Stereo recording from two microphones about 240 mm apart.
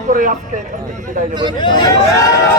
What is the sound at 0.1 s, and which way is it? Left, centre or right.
Speech, right.